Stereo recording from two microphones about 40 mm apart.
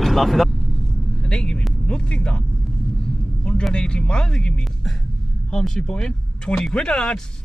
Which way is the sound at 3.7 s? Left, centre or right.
Left.